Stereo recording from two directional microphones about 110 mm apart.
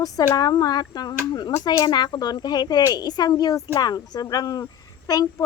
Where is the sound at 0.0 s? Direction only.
35° left (ahead or behind).